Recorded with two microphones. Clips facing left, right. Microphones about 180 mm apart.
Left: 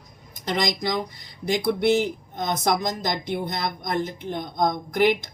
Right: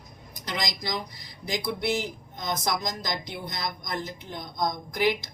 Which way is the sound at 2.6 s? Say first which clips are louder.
Left 9 dB; 55° left (ahead or behind).